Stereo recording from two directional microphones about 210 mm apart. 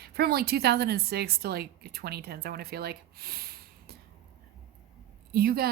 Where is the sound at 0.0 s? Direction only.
45° right (ahead or behind).